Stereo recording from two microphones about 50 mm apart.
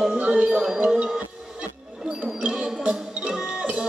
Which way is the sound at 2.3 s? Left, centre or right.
Right.